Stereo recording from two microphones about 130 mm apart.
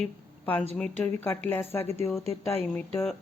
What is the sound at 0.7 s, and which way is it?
Speech, 5° left (ahead or behind).